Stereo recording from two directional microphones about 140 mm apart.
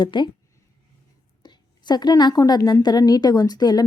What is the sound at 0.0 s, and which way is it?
Speech, 35° left (ahead or behind).